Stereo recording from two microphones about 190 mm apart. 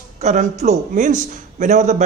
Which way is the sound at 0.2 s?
35° right (ahead or behind).